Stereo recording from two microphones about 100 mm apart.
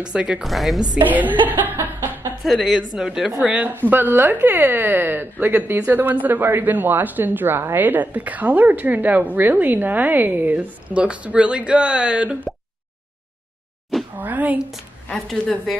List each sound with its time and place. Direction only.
0.1 s speech: 10° right (ahead or behind)
1.0 s speech: 20° right (ahead or behind)
2.4 s speech: centre (ahead or behind)
14.1 s a sound: 15° right (ahead or behind)
15.2 s speech: 5° left (ahead or behind)